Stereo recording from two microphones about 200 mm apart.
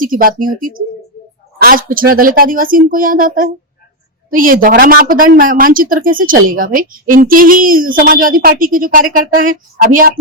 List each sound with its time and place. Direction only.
0.0 s speech: 45° right (ahead or behind)